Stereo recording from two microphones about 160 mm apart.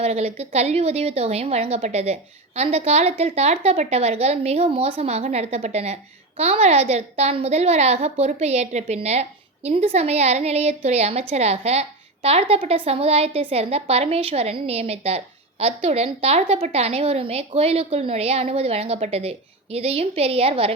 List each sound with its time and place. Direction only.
0.0 s a woman's voice: 40° right (ahead or behind)